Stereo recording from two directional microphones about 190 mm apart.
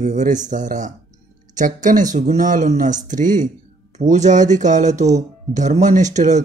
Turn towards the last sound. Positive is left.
turn(degrees=-40)  # may be behind; listen again after turning